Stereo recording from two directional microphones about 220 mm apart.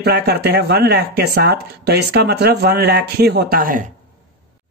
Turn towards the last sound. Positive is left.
turn(degrees=-40)  # may be behind; listen again after turning